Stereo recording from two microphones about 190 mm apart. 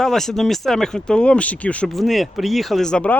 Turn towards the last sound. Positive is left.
turn(degrees=5)  # may be behind; listen again after turning